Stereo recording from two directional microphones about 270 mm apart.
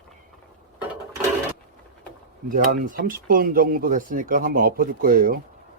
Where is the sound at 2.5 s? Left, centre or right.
Right.